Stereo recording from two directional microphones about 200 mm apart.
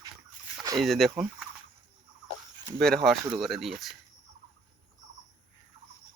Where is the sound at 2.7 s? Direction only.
Centre (ahead or behind).